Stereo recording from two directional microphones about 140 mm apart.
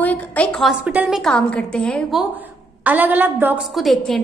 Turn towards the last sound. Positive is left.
turn(degrees=0)  # may be behind; listen again after turning